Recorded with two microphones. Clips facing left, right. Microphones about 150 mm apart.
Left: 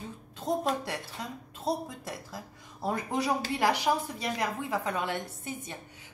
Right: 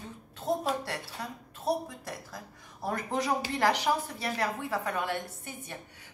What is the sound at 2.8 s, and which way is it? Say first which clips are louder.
A woman's voice: left 1 dB; 15° left (ahead or behind).